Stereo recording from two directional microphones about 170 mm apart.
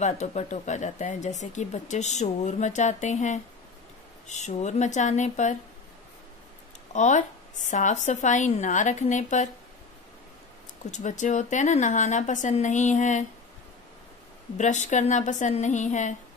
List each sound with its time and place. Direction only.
0.0 s speech: 45° left (ahead or behind)
6.9 s speech: 45° left (ahead or behind)
10.9 s speech: 45° left (ahead or behind)
14.6 s speech: 45° left (ahead or behind)